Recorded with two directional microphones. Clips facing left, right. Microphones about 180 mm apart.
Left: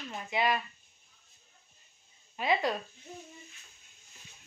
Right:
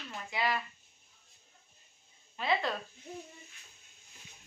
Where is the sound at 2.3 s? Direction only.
15° left (ahead or behind).